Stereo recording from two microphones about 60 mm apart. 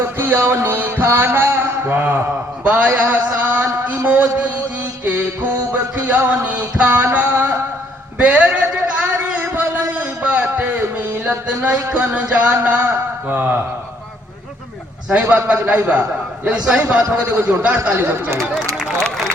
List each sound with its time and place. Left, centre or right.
0.0 s music: right
2.6 s a sound: right
5.0 s music: right
8.2 s a sound: right
12.1 s a man's voice: right
15.1 s a man's voice: right
17.9 s speech: right
18.7 s speech: centre